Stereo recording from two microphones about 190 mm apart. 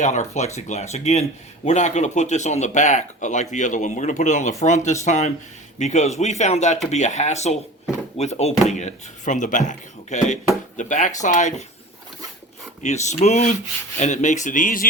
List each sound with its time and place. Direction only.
0.0 s speech: 40° left (ahead or behind)
12.8 s speech: 35° left (ahead or behind)